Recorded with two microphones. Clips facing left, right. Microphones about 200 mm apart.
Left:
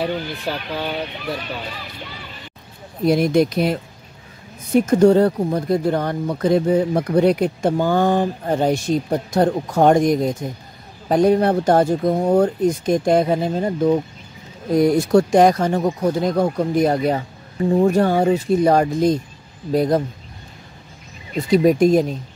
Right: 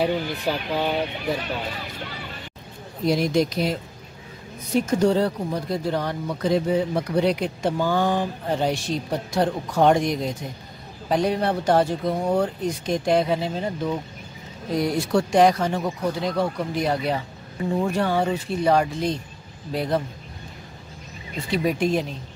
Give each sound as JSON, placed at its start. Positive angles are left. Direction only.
{"t": 0.0, "sound": "speech", "side_deg": -15}
{"t": 3.1, "sound": "speech", "side_deg": 55}
{"t": 4.7, "sound": "speech", "side_deg": 55}
{"t": 21.5, "sound": "speech", "side_deg": 40}